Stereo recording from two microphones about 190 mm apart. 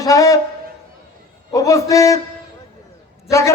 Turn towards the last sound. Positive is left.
turn(degrees=15)  # may be behind; listen again after turning